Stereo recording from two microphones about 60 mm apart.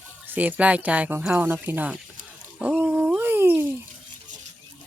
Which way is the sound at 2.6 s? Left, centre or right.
Right.